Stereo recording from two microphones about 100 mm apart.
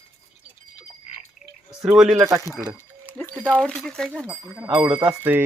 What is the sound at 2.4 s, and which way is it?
Speech, 30° left (ahead or behind).